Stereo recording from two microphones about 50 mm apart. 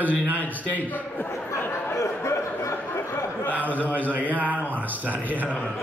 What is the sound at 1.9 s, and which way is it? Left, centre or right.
Speech, left.